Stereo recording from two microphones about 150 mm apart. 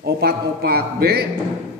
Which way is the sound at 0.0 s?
90° right.